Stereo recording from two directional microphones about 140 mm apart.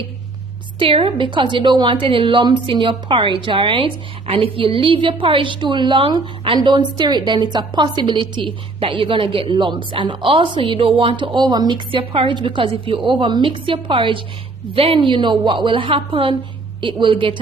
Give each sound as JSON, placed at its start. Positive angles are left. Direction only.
{"t": 0.8, "sound": "a woman's voice", "side_deg": -40}